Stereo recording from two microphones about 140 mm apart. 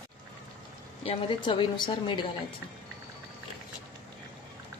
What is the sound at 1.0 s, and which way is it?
A woman's voice, 35° left (ahead or behind).